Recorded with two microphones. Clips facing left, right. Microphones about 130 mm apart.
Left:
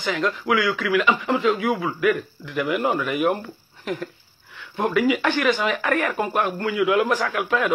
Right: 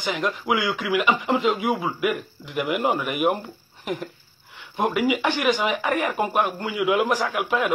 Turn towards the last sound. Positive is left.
turn(degrees=-15)  # may be behind; listen again after turning